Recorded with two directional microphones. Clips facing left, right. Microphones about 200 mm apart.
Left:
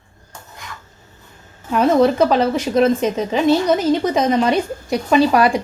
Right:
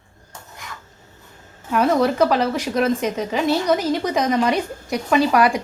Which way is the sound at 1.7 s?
25° left (ahead or behind).